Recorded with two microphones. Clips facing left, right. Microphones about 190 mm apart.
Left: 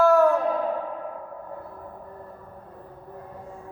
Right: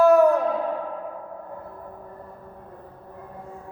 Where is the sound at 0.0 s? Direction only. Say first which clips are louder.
Right 2 dB; 15° right (ahead or behind).